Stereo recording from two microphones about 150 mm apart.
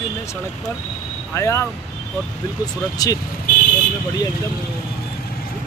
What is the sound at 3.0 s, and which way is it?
Speech, 25° left (ahead or behind).